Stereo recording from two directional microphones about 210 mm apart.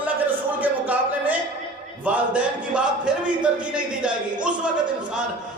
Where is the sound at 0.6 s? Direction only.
5° right (ahead or behind).